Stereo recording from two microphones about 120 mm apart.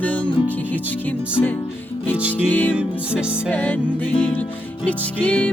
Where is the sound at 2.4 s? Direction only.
15° left (ahead or behind).